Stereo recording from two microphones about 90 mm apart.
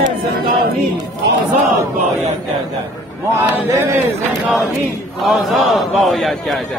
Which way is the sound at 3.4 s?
35° right (ahead or behind).